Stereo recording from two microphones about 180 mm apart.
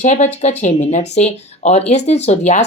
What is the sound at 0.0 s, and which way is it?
Speech, 40° left (ahead or behind).